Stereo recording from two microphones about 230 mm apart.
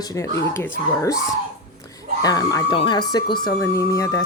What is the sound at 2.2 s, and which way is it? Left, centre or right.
Speech, centre.